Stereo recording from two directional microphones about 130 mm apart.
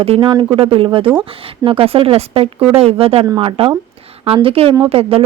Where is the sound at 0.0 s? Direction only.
45° right (ahead or behind).